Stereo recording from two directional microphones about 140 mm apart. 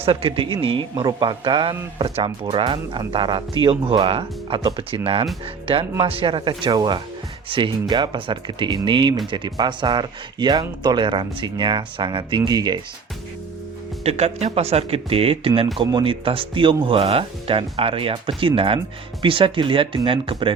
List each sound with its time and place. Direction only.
0.0 s speech: 40° right (ahead or behind)
14.0 s speech: 50° right (ahead or behind)